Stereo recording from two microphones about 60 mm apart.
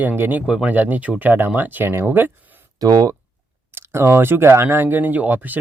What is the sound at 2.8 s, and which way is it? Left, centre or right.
Speech, right.